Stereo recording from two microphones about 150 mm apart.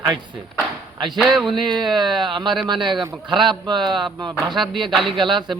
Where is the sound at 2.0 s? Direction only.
30° right (ahead or behind).